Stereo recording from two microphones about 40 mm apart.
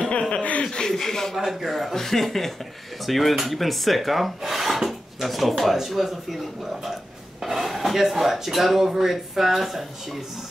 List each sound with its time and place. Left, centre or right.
0.0 s chuckle: left
0.7 s a sound: centre
1.3 s speech: centre